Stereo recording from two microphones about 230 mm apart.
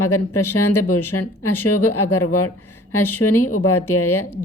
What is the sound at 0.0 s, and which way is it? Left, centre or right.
Speech, left.